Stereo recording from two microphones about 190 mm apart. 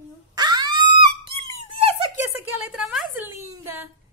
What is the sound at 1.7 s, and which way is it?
Squeak, 30° right (ahead or behind).